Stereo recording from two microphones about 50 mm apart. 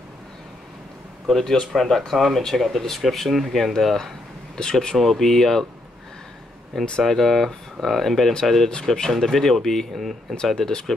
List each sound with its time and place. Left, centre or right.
1.2 s speech: centre
6.7 s speech: centre
8.6 s speech: centre